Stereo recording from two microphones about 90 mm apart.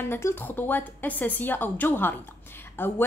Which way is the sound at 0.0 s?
25° left (ahead or behind).